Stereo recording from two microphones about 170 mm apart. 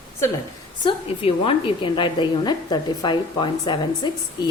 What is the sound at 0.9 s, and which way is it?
A woman's voice, 30° left (ahead or behind).